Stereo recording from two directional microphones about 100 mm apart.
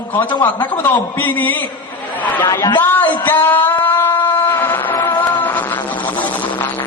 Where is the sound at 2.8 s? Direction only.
20° left (ahead or behind).